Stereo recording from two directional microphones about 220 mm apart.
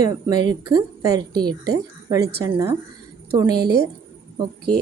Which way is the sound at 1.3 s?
45° right (ahead or behind).